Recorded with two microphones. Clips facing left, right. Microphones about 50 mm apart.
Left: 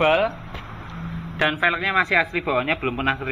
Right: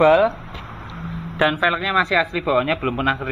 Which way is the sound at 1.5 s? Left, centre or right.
Left.